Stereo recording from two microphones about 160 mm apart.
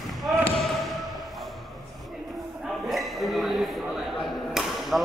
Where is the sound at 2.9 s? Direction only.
Centre (ahead or behind).